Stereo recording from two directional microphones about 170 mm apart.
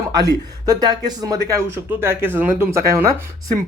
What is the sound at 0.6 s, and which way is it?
Speech, 20° right (ahead or behind).